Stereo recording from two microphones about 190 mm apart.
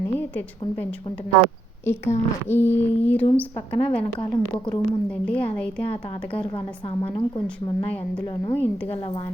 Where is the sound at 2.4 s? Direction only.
10° left (ahead or behind).